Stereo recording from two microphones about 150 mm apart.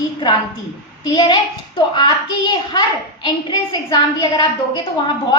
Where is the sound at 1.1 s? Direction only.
30° left (ahead or behind).